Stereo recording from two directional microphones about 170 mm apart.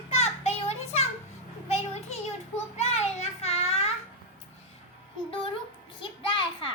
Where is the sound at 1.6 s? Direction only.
40° left (ahead or behind).